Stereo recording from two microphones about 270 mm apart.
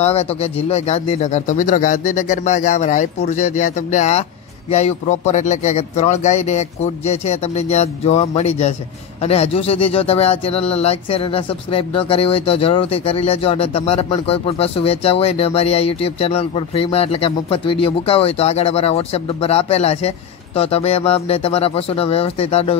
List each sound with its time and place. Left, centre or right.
0.0 s speech: left